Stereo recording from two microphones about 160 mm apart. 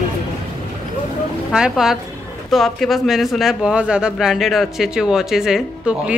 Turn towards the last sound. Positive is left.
turn(degrees=-5)  # may be behind; listen again after turning